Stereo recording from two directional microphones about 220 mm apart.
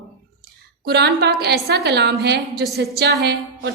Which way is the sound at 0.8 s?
50° right (ahead or behind).